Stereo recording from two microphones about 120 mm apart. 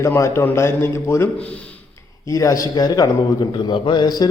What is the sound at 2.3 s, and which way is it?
A man's voice, 25° left (ahead or behind).